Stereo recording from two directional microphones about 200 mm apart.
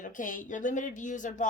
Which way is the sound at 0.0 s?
40° left (ahead or behind).